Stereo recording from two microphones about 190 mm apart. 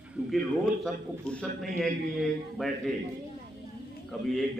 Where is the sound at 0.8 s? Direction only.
5° left (ahead or behind).